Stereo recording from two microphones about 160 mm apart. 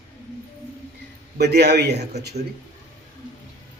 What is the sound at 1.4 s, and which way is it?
Speech, 90° right.